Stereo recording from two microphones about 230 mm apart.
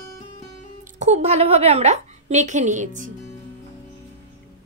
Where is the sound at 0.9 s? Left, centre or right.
Right.